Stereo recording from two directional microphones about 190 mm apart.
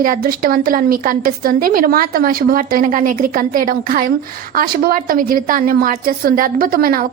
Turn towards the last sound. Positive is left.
turn(degrees=-50)  # may be behind; listen again after turning